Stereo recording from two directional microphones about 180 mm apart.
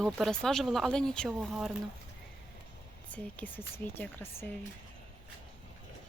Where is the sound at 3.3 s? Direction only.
10° left (ahead or behind).